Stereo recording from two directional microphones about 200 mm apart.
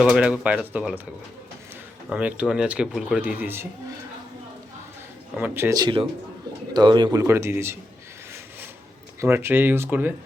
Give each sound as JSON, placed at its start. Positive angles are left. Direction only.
{"t": 0.0, "sound": "speech", "side_deg": -5}
{"t": 2.0, "sound": "speech", "side_deg": -5}
{"t": 5.3, "sound": "speech", "side_deg": -10}
{"t": 9.2, "sound": "speech", "side_deg": -10}